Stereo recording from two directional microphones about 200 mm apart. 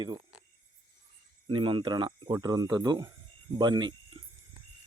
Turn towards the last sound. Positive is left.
turn(degrees=-25)  # may be behind; listen again after turning